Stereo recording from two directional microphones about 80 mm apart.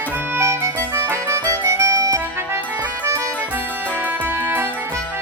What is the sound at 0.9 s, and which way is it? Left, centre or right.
Music, right.